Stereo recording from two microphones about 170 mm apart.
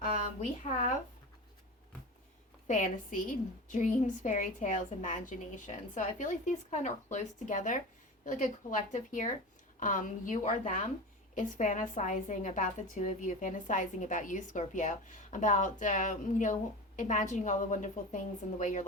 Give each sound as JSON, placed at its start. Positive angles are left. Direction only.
{"t": 0.6, "sound": "a woman's voice", "side_deg": 50}
{"t": 2.6, "sound": "a woman's voice", "side_deg": 50}